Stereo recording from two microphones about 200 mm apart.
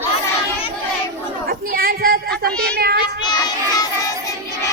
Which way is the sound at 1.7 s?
50° right (ahead or behind).